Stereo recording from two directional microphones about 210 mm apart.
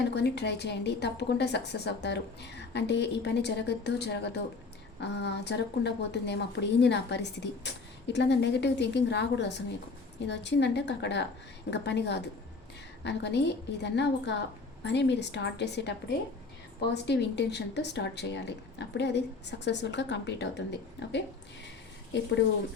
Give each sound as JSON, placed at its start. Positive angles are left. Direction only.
{"t": 0.1, "sound": "a woman's voice", "side_deg": 55}